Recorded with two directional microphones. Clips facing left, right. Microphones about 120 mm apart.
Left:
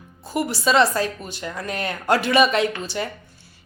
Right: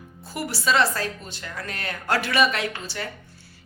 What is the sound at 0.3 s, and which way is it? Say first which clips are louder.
Speech: left 4 dB; 20° left (ahead or behind).